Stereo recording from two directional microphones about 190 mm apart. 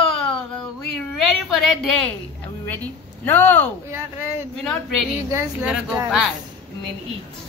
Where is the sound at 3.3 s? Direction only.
10° left (ahead or behind).